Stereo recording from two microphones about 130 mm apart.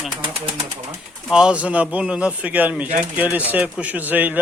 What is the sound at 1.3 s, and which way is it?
Speech, 5° right (ahead or behind).